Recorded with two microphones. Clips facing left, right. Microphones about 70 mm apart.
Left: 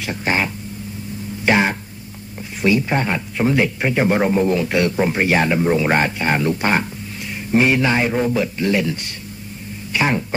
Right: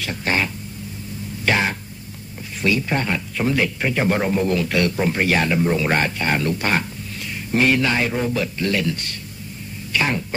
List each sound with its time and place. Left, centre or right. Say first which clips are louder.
0.0 s speech: left 2 dB; centre
1.4 s a sound: left 4 dB; centre
2.6 s speech: left 3 dB; centre